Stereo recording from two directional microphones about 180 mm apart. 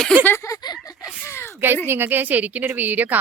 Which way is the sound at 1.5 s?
10° right (ahead or behind).